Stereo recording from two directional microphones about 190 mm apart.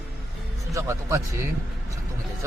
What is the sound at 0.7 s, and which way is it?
Speech, 15° right (ahead or behind).